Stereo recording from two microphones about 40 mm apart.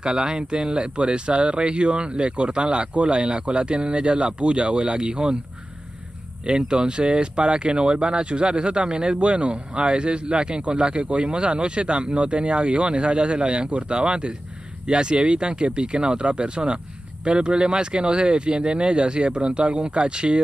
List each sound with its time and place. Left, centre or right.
0.0 s speech: centre
6.4 s speech: right